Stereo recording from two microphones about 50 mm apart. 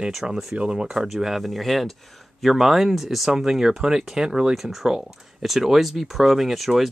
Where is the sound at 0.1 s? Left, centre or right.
Centre.